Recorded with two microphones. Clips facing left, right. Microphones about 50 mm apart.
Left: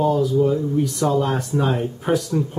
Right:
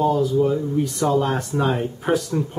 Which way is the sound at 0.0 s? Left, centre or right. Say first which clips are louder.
Left 1 dB; centre.